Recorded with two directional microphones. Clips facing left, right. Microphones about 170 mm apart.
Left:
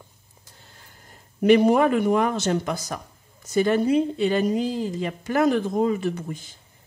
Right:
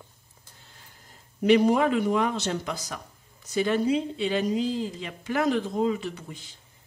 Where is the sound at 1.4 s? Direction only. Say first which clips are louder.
Left 3 dB; 55° left (ahead or behind).